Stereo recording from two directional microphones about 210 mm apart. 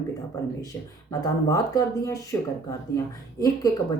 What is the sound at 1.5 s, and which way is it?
A woman's voice, 15° left (ahead or behind).